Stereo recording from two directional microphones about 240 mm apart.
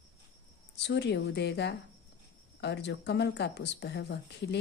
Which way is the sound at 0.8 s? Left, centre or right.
Left.